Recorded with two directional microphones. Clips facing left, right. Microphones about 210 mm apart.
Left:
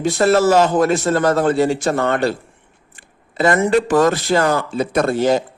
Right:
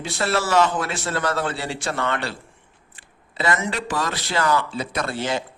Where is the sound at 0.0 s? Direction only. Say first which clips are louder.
Left 10 dB; 45° left (ahead or behind).